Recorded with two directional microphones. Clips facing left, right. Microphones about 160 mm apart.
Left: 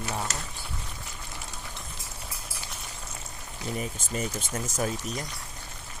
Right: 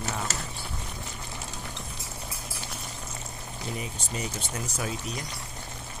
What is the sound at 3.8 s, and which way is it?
Speech, 45° left (ahead or behind).